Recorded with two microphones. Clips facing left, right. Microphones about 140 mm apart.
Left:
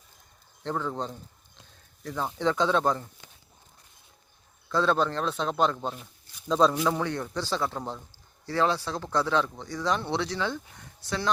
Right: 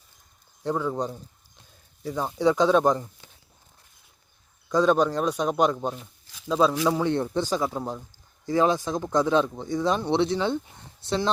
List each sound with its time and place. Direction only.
0.6 s speech: 10° right (ahead or behind)
4.7 s speech: 15° right (ahead or behind)
6.2 s a sound: 90° right
6.5 s speech: 5° right (ahead or behind)
7.0 s speech: 20° right (ahead or behind)